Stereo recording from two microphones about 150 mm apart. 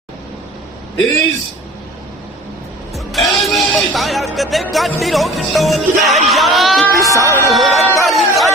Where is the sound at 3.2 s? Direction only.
Centre (ahead or behind).